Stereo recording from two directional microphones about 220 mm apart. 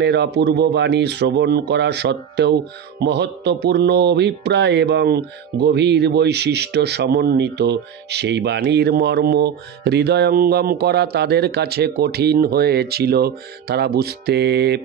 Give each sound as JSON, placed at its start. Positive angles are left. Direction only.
{"t": 0.0, "sound": "music", "side_deg": -50}